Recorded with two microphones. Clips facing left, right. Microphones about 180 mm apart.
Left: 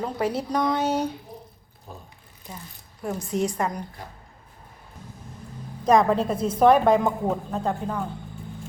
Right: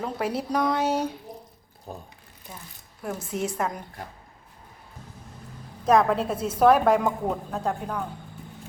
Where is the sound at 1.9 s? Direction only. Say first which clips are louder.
Right 4 dB; 40° right (ahead or behind).